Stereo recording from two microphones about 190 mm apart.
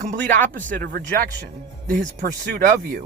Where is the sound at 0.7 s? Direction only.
50° right (ahead or behind).